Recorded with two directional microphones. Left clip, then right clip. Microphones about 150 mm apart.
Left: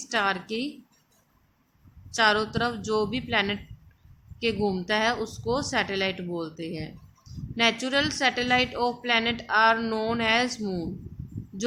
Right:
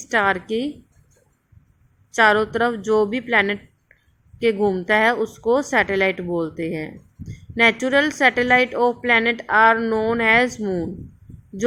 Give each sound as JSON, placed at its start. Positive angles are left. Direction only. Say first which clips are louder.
{"t": 0.1, "sound": "a woman's voice", "louder": "right 7 dB", "side_deg": -40}
{"t": 2.1, "sound": "a woman's voice", "louder": "right 7 dB", "side_deg": -40}
{"t": 10.6, "sound": "a woman's voice", "louder": "right 8 dB", "side_deg": -30}